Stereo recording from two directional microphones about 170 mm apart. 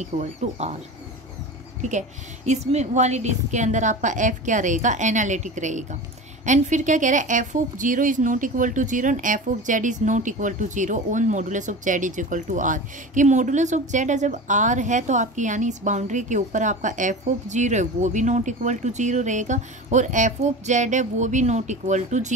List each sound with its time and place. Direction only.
0.0 s speech: 40° right (ahead or behind)
1.8 s a woman's voice: 45° right (ahead or behind)